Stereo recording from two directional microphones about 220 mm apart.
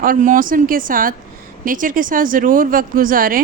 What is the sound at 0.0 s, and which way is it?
A woman's voice, 40° right (ahead or behind).